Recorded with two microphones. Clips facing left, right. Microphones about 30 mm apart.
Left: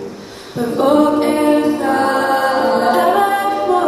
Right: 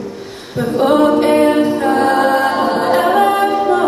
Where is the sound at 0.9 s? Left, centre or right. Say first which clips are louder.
Right 1 dB; right.